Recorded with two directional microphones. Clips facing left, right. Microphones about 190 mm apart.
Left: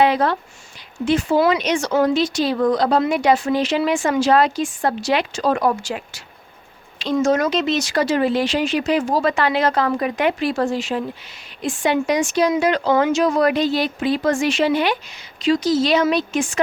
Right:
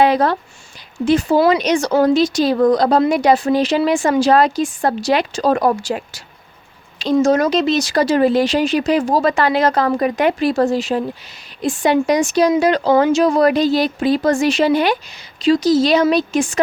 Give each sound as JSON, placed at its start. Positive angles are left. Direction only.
{"t": 0.0, "sound": "speech", "side_deg": -40}